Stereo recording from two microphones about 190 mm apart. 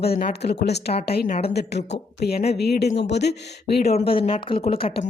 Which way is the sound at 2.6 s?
60° left (ahead or behind).